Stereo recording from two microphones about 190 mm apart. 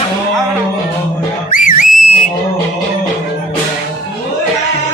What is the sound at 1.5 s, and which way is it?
Whistle, 45° left (ahead or behind).